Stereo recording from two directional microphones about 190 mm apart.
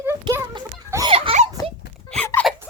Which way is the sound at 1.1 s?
30° right (ahead or behind).